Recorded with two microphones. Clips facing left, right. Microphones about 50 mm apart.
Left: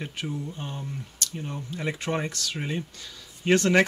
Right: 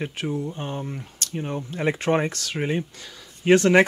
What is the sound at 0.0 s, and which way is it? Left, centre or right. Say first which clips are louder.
Speech: right 5 dB; right.